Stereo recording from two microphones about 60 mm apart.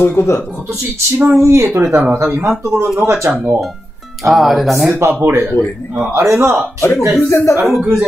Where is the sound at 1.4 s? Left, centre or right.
Right.